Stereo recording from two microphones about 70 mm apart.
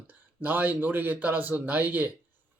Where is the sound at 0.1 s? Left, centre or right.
Right.